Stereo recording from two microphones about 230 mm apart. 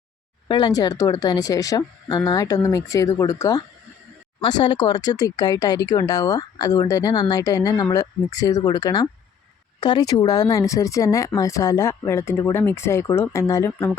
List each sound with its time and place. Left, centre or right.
0.4 s speech: centre